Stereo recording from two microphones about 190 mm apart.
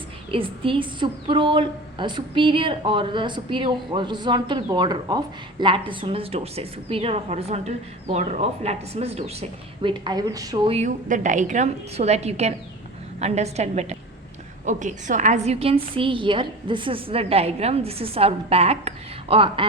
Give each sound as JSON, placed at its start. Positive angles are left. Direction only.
{"t": 0.3, "sound": "a woman's voice", "side_deg": -30}
{"t": 10.7, "sound": "a woman's voice", "side_deg": -35}